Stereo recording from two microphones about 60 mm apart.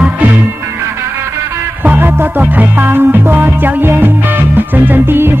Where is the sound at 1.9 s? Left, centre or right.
Right.